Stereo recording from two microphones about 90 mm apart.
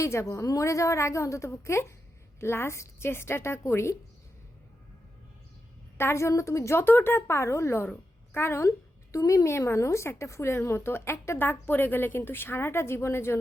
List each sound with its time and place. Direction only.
0.0 s a woman's voice: 30° left (ahead or behind)
6.0 s a woman's voice: 30° left (ahead or behind)